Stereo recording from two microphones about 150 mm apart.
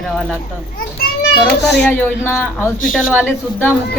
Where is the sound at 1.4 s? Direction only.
10° left (ahead or behind).